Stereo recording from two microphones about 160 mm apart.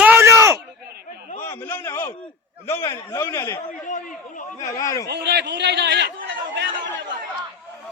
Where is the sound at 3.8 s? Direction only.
55° left (ahead or behind).